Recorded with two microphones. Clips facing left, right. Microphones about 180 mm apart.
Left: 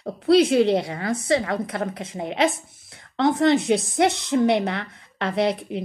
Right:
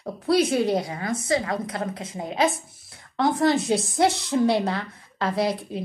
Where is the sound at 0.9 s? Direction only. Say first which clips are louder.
Left 2 dB; 60° left (ahead or behind).